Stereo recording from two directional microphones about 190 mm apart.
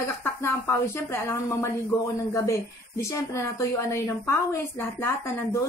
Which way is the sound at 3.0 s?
15° left (ahead or behind).